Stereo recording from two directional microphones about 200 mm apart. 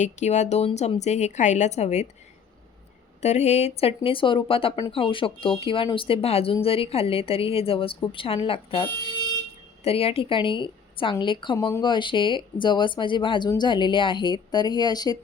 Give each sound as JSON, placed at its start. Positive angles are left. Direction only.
{"t": 0.0, "sound": "a woman's voice", "side_deg": 35}
{"t": 3.2, "sound": "speech", "side_deg": 35}